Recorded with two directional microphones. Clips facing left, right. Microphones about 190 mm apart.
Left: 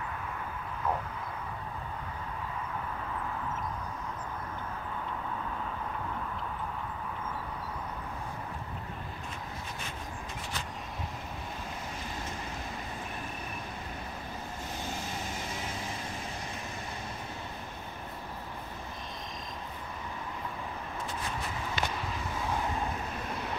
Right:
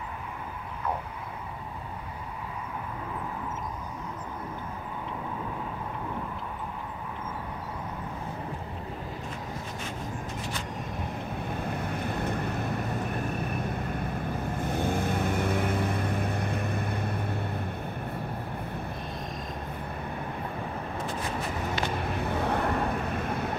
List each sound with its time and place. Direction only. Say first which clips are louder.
11.5 s waves: right 8 dB; 60° right (ahead or behind)
13.5 s vehicle: right 9 dB; 55° right (ahead or behind)
21.9 s vehicle: right 6 dB; 60° right (ahead or behind)